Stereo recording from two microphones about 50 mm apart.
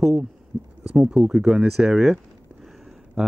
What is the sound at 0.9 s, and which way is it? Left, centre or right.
Speech, centre.